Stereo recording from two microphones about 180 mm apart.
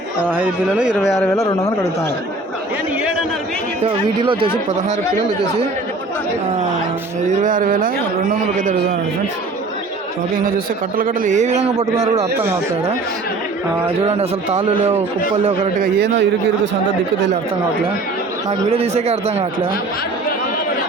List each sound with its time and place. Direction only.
0.3 s speech: 10° right (ahead or behind)
1.0 s speech: 15° left (ahead or behind)
3.8 s speech: 30° right (ahead or behind)
7.4 s speech: 50° right (ahead or behind)
10.9 s a man's voice: 50° right (ahead or behind)
14.0 s a man's voice: 35° right (ahead or behind)
15.8 s a man's voice: 70° right (ahead or behind)
18.7 s a man's voice: 35° right (ahead or behind)